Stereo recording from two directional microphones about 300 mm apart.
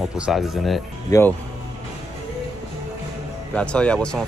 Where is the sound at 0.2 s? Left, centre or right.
Centre.